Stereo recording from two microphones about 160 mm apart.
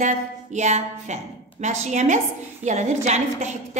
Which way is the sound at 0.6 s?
45° right (ahead or behind).